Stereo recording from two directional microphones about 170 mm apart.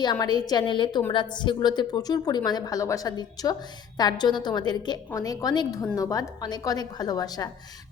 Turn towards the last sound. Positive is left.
turn(degrees=20)  # may be behind; listen again after turning